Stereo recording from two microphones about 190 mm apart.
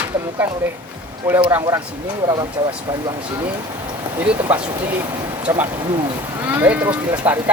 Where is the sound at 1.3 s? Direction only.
10° right (ahead or behind).